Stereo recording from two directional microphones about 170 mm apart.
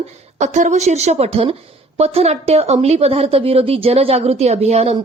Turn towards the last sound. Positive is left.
turn(degrees=-40)  # may be behind; listen again after turning